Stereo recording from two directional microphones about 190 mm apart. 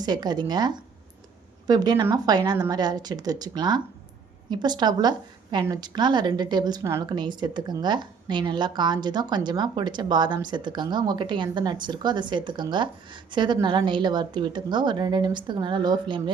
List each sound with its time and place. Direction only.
0.0 s a woman's voice: 20° right (ahead or behind)